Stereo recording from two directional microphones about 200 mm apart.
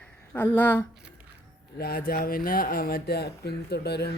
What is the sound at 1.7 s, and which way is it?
Speech, 50° left (ahead or behind).